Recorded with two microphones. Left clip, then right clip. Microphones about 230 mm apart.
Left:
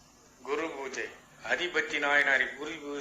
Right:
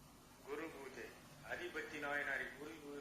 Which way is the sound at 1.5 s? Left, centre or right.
Left.